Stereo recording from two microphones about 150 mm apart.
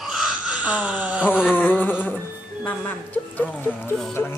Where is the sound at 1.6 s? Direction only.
10° left (ahead or behind).